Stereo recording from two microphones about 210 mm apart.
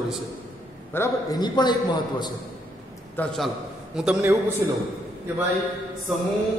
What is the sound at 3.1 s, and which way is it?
A man's voice, 5° left (ahead or behind).